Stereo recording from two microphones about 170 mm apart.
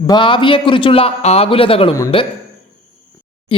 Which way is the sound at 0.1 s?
30° left (ahead or behind).